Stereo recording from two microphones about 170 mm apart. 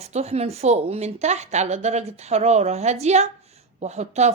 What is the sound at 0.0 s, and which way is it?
A woman's voice, 40° right (ahead or behind).